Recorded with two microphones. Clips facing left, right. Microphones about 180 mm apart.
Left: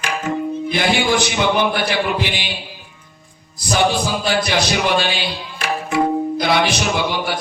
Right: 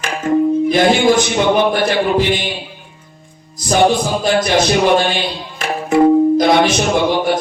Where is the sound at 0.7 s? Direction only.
45° right (ahead or behind).